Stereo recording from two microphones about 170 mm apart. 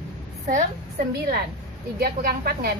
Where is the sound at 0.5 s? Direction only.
50° right (ahead or behind).